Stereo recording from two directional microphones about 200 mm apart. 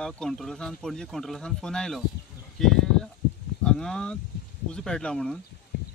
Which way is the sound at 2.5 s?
Centre (ahead or behind).